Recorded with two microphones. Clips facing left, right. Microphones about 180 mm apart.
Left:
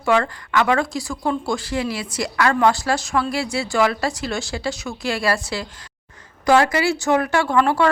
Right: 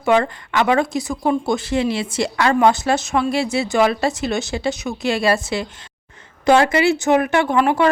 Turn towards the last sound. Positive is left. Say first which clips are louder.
# right 2 dB
turn(degrees=-20)  # may be behind; listen again after turning